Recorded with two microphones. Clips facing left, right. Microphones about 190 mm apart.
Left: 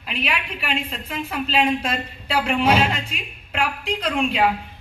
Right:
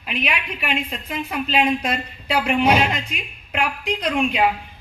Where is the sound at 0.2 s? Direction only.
10° right (ahead or behind).